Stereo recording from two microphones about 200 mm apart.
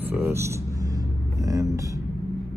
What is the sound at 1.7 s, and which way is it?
Vehicle, 15° right (ahead or behind).